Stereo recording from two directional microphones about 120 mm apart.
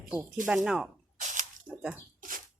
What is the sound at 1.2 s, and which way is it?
Chewing, 90° right.